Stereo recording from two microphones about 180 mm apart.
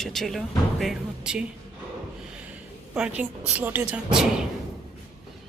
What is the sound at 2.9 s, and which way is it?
Speech, 5° right (ahead or behind).